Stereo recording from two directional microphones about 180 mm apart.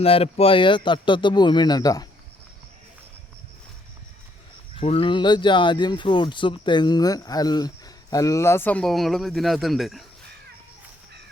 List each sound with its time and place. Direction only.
0.0 s speech: 35° left (ahead or behind)
4.8 s speech: 30° left (ahead or behind); by 10.0 s centre (ahead or behind)